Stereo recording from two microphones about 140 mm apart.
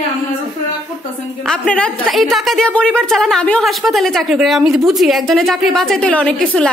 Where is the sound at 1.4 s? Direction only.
5° left (ahead or behind).